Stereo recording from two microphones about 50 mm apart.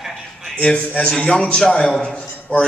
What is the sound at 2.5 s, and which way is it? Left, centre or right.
Speech, left.